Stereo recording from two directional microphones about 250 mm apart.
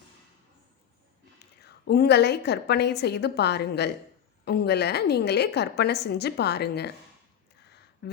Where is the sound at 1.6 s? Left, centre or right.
Left.